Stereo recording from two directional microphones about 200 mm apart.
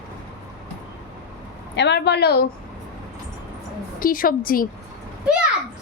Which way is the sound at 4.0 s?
45° left (ahead or behind).